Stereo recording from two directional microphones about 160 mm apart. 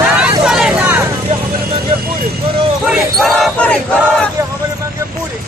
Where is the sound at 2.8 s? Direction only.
5° right (ahead or behind).